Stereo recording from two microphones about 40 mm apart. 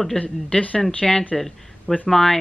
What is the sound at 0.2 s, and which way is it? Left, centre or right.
Speech, left.